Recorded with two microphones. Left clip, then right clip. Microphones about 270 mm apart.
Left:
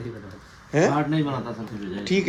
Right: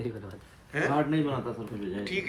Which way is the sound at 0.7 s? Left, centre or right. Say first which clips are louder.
Left 8 dB; centre.